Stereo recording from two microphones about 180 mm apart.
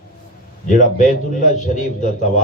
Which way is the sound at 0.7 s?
45° left (ahead or behind).